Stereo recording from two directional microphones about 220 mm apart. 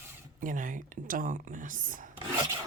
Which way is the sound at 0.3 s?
35° right (ahead or behind).